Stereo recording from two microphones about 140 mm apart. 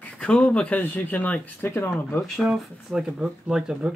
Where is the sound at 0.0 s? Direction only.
5° left (ahead or behind).